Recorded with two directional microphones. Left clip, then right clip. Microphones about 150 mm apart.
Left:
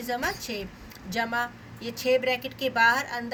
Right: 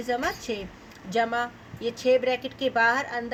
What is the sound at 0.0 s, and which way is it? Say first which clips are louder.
A woman's voice: right 2 dB; 55° right (ahead or behind).